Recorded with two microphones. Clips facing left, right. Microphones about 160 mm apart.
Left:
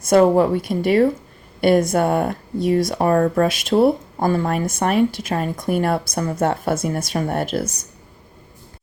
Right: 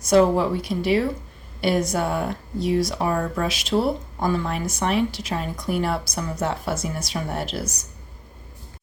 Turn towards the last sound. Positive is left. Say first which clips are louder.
# left 6 dB
turn(degrees=55)  # may be behind; listen again after turning